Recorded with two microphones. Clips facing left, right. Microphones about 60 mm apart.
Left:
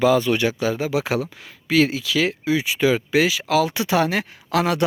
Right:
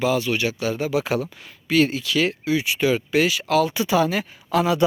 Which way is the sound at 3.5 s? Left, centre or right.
Left.